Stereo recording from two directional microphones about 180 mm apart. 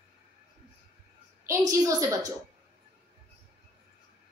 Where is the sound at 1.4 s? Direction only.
15° right (ahead or behind).